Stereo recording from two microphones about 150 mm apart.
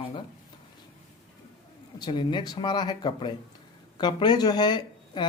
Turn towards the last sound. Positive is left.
turn(degrees=30)  # may be behind; listen again after turning